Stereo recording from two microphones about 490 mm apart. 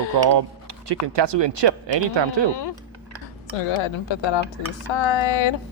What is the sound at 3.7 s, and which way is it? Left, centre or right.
Speech, left.